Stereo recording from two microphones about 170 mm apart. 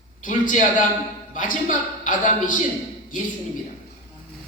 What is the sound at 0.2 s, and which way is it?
A man's voice, 50° left (ahead or behind).